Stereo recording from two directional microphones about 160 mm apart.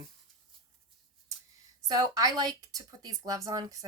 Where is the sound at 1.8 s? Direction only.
25° right (ahead or behind).